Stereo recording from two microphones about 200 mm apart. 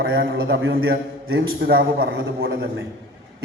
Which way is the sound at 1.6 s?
60° right (ahead or behind).